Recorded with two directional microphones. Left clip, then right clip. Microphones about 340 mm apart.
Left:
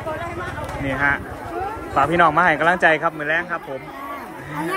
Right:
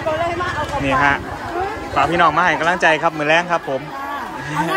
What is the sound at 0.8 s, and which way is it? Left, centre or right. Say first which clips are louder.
A man's voice: right 4 dB; centre.